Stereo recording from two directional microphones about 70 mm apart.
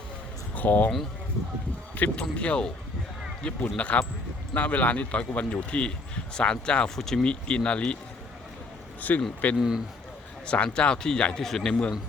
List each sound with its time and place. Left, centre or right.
0.5 s speech: left
2.2 s speech: centre
9.0 s speech: left
9.6 s speech: centre
10.4 s speech: centre